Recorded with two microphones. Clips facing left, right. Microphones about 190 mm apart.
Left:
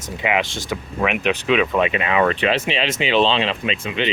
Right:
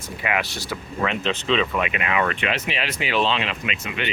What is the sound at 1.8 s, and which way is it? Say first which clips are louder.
Speech: left 5 dB; 30° left (ahead or behind).